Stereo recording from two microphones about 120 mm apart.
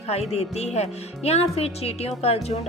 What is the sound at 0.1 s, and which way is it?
Speech, 60° left (ahead or behind).